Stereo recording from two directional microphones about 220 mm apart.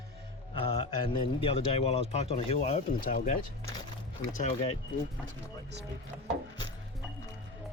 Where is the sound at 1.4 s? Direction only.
25° left (ahead or behind).